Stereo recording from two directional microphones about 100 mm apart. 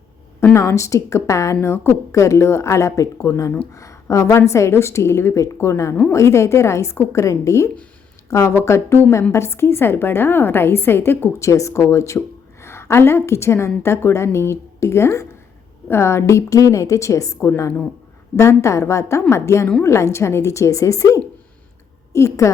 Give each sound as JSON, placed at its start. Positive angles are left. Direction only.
{"t": 0.5, "sound": "a woman's voice", "side_deg": 25}